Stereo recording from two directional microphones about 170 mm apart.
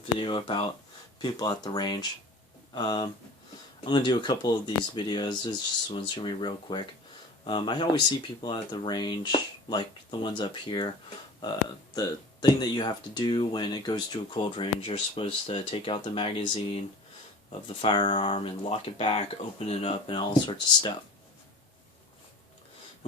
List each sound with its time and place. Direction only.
0.2 s speech: 30° left (ahead or behind)
11.9 s speech: 25° left (ahead or behind)